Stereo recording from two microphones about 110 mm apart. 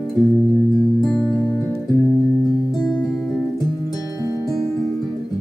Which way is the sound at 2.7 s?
5° left (ahead or behind).